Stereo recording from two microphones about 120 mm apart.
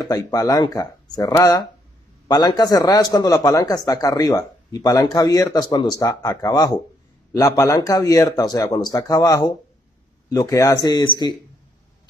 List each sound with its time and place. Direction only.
0.0 s a man's voice: 30° left (ahead or behind)